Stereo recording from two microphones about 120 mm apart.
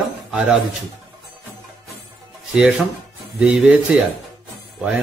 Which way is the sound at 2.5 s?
5° right (ahead or behind).